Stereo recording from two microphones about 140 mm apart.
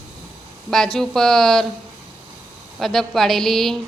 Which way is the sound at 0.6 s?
Centre (ahead or behind).